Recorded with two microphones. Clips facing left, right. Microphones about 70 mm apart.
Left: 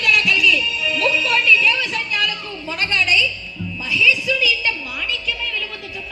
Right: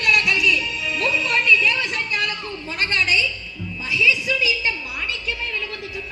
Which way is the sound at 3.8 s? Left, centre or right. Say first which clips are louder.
Left 2 dB; right.